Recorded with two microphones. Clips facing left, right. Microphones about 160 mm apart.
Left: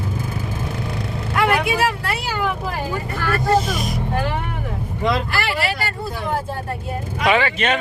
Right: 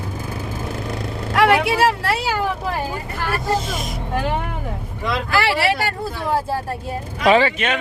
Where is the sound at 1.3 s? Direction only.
90° right.